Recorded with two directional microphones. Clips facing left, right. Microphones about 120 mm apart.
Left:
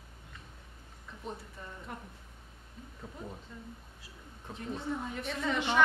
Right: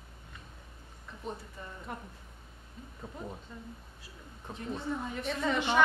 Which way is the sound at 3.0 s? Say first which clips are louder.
Right 3 dB; 30° right (ahead or behind).